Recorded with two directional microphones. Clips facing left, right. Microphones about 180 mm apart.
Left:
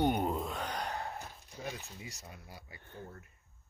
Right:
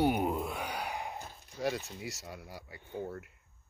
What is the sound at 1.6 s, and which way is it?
Speech, 80° right.